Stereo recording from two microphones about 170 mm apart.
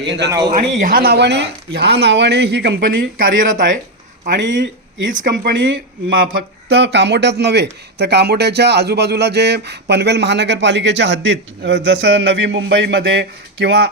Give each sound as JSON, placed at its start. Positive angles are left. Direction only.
{"t": 0.5, "sound": "speech", "side_deg": -50}
{"t": 3.4, "sound": "speech", "side_deg": -50}
{"t": 4.3, "sound": "speech", "side_deg": -90}
{"t": 5.2, "sound": "speech", "side_deg": -75}